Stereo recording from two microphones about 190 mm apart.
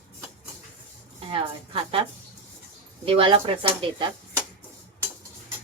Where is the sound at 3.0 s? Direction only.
30° right (ahead or behind).